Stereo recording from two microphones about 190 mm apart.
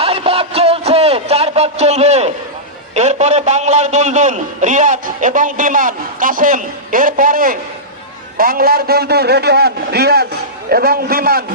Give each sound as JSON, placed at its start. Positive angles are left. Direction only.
{"t": 0.0, "sound": "music", "side_deg": -30}
{"t": 2.9, "sound": "a man's voice", "side_deg": -35}